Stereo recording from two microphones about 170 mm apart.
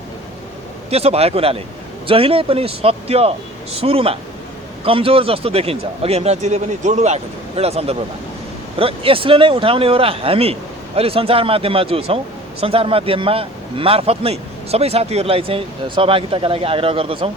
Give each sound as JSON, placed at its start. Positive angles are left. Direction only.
{"t": 0.9, "sound": "speech", "side_deg": -35}